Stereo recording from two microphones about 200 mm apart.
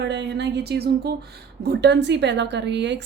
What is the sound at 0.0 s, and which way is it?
A woman's voice, 60° right (ahead or behind).